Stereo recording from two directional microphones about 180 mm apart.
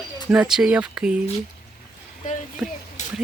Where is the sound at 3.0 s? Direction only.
40° left (ahead or behind).